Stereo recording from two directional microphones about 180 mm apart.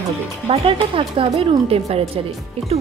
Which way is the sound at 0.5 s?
30° right (ahead or behind).